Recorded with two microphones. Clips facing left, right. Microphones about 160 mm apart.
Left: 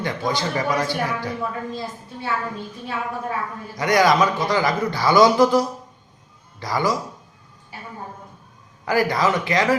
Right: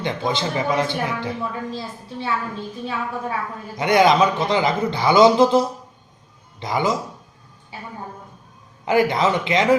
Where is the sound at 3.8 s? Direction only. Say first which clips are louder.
Right 2 dB; 25° right (ahead or behind).